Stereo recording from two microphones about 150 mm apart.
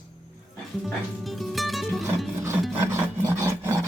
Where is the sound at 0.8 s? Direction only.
Centre (ahead or behind).